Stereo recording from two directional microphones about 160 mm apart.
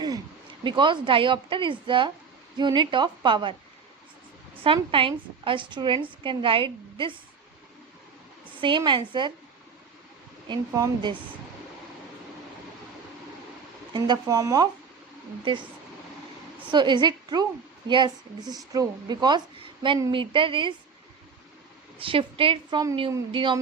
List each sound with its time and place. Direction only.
0.6 s a woman's voice: 30° right (ahead or behind)
4.6 s a woman's voice: 35° right (ahead or behind)
8.5 s a woman's voice: 30° right (ahead or behind)
10.7 s a woman's voice: 20° right (ahead or behind)
13.9 s a woman's voice: 25° right (ahead or behind)
15.5 s a woman's voice: 30° right (ahead or behind)
16.7 s a woman's voice: 30° right (ahead or behind)
21.9 s a woman's voice: 35° right (ahead or behind)